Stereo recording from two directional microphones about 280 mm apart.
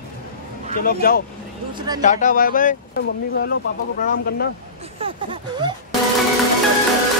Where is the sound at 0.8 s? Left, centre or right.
Left.